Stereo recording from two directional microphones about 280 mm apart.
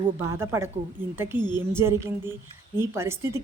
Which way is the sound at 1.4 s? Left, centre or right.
Centre.